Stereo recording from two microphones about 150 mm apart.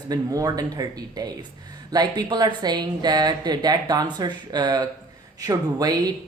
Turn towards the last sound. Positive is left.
turn(degrees=-25)  # may be behind; listen again after turning